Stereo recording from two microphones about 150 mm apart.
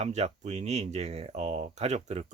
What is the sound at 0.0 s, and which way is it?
Speech, 45° right (ahead or behind).